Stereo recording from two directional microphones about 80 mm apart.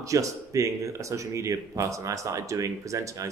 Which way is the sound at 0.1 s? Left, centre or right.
Right.